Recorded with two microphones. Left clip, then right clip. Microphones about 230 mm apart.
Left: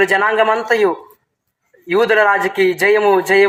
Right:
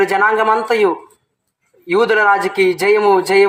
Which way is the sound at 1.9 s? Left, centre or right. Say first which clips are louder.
Even; right.